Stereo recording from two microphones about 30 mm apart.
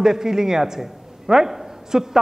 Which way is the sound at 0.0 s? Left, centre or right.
Centre.